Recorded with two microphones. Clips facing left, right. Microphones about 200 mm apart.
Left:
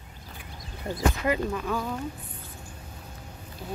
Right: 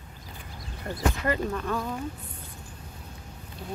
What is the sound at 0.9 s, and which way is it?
Speech, 20° left (ahead or behind).